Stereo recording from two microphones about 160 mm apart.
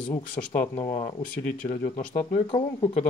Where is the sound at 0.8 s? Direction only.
40° left (ahead or behind).